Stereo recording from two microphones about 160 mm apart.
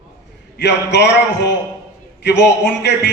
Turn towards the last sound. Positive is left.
turn(degrees=90)